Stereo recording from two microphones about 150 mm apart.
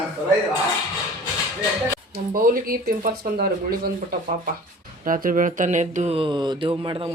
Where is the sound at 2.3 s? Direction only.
65° right (ahead or behind); by 3.5 s 85° right.